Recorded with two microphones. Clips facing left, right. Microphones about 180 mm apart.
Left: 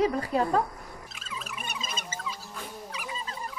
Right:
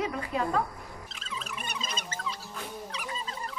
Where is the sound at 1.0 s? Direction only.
5° left (ahead or behind).